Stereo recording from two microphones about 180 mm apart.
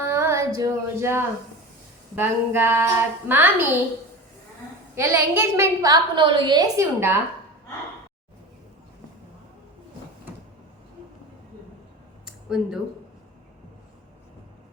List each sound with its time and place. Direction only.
0.0 s female singing: 15° right (ahead or behind)
2.1 s a woman's voice: 10° right (ahead or behind)
4.9 s a woman's voice: 15° right (ahead or behind)
12.2 s a sound: 5° right (ahead or behind)